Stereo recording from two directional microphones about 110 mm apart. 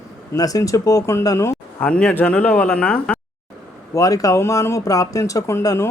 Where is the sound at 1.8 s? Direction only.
10° left (ahead or behind).